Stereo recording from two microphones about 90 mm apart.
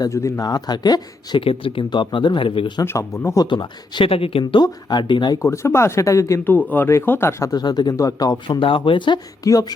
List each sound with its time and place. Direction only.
0.0 s speech: 35° left (ahead or behind)
0.4 s speech: 50° left (ahead or behind)
1.4 s speech: 80° left; by 2.8 s 65° left (ahead or behind)
2.8 s speech: 30° left (ahead or behind)
3.4 s speech: 60° left (ahead or behind); by 4.6 s 90° left
4.6 s speech: 55° left (ahead or behind)
5.4 s speech: 30° left (ahead or behind)
6.4 s speech: 20° left (ahead or behind)
7.5 s speech: 50° left (ahead or behind)
8.4 s speech: 70° left (ahead or behind)
9.4 s speech: 45° left (ahead or behind)